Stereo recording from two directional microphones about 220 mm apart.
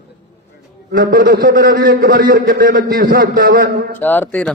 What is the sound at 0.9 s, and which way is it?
A man's voice, 40° right (ahead or behind).